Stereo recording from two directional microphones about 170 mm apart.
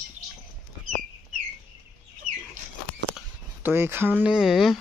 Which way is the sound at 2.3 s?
45° right (ahead or behind).